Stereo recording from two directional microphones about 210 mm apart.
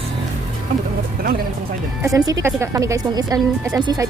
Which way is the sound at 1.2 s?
45° right (ahead or behind).